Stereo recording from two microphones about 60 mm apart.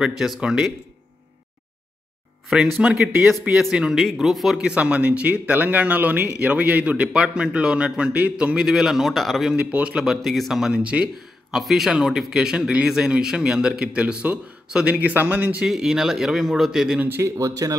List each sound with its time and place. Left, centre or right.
0.0 s speech: centre
2.8 s speech: centre
3.1 s speech: right
3.4 s speech: centre
4.6 s speech: centre
7.1 s speech: centre
9.6 s speech: right
9.9 s speech: centre
10.8 s speech: right
11.5 s speech: centre
15.0 s speech: right
15.6 s speech: centre
17.2 s speech: right